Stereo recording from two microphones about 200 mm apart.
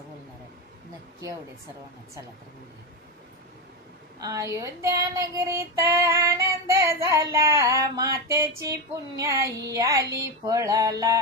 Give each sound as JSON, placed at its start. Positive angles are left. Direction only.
{"t": 4.2, "sound": "female singing", "side_deg": -15}